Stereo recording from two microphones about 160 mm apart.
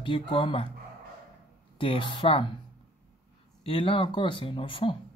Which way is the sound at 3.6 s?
35° left (ahead or behind).